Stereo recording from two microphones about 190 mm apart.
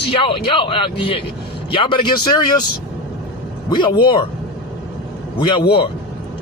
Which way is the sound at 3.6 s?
25° left (ahead or behind).